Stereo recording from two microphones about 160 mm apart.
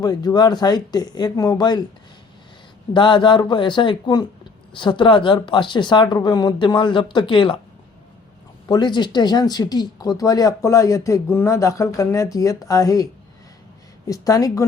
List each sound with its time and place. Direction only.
0.0 s speech: 25° left (ahead or behind)
2.9 s speech: 30° left (ahead or behind)
8.7 s speech: 30° left (ahead or behind)
14.1 s speech: 20° left (ahead or behind)